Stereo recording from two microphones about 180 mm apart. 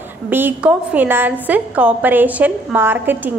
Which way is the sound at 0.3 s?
10° right (ahead or behind).